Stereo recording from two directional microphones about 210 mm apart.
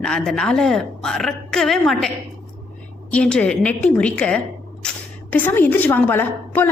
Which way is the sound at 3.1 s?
5° left (ahead or behind).